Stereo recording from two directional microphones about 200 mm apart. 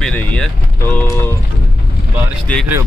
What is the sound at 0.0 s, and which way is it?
Vehicle, 5° left (ahead or behind).